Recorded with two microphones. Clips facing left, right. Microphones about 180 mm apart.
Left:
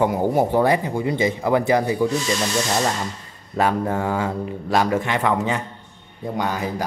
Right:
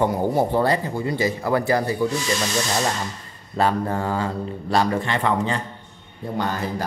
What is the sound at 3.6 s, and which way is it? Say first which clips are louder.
Speech: left 1 dB; 10° left (ahead or behind).